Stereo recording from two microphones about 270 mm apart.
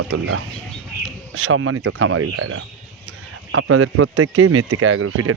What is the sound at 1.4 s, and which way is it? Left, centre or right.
Speech, right.